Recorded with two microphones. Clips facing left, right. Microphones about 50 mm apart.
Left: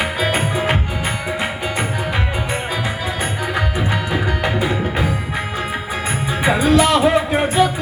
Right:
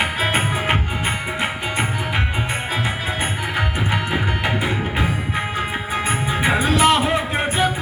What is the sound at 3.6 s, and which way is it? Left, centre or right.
Music, right.